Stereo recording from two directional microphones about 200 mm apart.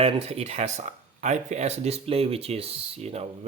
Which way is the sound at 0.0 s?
30° right (ahead or behind).